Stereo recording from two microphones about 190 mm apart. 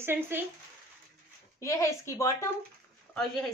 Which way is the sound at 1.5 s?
15° left (ahead or behind).